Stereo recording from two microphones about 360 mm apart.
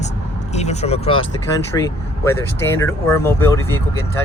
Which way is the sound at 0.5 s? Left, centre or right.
Centre.